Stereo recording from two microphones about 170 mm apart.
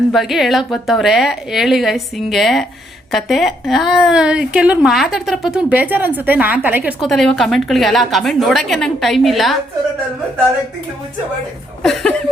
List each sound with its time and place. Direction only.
0.1 s a woman's voice: centre (ahead or behind)
11.8 s a woman's voice: centre (ahead or behind)